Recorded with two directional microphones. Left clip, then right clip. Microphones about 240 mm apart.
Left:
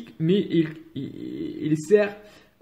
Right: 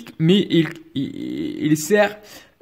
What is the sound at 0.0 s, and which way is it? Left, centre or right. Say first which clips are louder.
A man's voice: right 5 dB; right.